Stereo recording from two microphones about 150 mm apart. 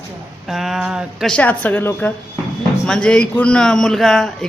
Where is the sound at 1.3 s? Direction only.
10° left (ahead or behind).